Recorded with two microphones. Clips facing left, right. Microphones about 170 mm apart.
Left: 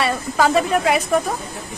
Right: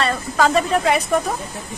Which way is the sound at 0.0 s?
5° left (ahead or behind).